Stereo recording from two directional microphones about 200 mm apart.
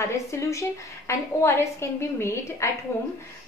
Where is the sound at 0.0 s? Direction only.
15° left (ahead or behind).